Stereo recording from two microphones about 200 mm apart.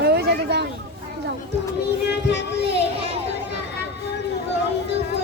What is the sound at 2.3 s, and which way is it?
Child singing, 60° left (ahead or behind).